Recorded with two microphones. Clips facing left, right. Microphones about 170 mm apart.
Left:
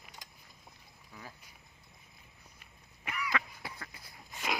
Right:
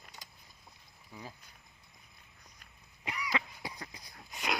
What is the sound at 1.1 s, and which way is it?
Speech, 15° right (ahead or behind).